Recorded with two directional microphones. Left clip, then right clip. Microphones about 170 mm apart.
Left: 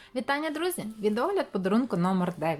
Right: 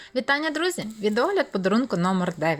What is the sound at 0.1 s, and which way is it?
Speech, 15° right (ahead or behind).